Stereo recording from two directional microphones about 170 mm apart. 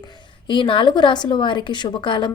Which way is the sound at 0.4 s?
30° left (ahead or behind).